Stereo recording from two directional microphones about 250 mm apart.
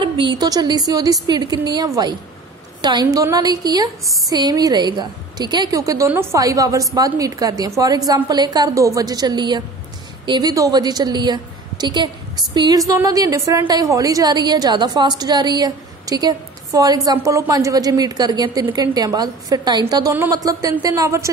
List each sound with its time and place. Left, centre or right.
0.0 s a woman's voice: centre
4.0 s speech: centre
4.3 s a woman's voice: centre